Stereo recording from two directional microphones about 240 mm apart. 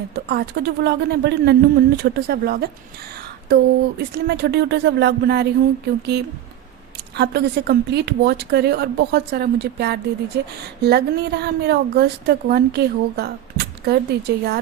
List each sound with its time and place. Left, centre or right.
0.1 s a woman's voice: right
7.2 s a woman's voice: right